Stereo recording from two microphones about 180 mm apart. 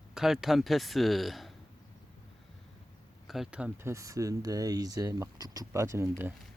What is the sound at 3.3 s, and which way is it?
Speech, 5° right (ahead or behind).